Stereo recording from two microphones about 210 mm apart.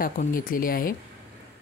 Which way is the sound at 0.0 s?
40° left (ahead or behind).